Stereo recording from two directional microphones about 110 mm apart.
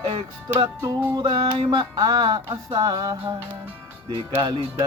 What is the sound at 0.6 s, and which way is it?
Music, 30° right (ahead or behind).